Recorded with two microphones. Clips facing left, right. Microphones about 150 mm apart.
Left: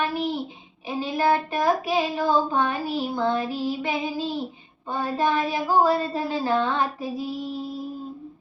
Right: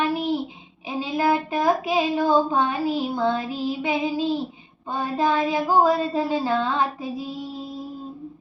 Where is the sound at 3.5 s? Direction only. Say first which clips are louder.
Right 2 dB; 20° right (ahead or behind).